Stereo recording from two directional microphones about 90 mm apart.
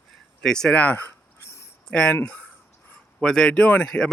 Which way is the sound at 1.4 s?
35° left (ahead or behind).